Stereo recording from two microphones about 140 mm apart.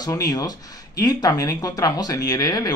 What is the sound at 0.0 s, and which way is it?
Speech, 25° left (ahead or behind).